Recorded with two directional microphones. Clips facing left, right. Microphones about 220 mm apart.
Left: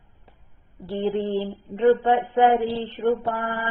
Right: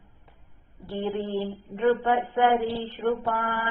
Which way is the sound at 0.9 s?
25° left (ahead or behind).